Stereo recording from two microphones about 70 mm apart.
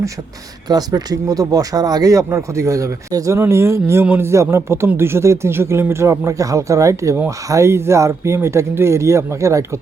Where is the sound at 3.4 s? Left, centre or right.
Right.